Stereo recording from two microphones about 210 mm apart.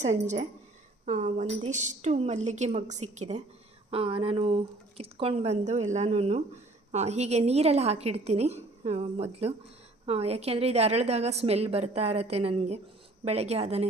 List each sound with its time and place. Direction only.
0.0 s a woman's voice: 35° right (ahead or behind)